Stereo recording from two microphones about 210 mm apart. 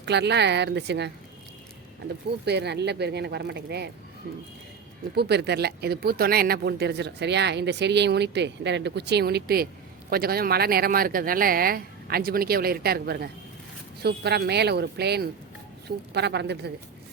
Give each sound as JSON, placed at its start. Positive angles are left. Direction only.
{"t": 0.0, "sound": "a woman's voice", "side_deg": -55}
{"t": 5.1, "sound": "speech", "side_deg": -50}